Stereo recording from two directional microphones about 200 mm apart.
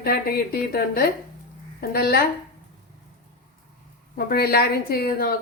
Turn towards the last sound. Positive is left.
turn(degrees=50)  # may be behind; listen again after turning